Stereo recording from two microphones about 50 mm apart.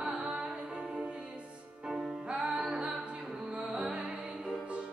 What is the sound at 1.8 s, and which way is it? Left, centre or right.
Music, centre.